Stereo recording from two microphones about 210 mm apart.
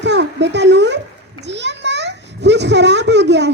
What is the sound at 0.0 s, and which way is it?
A child's voice, 55° right (ahead or behind).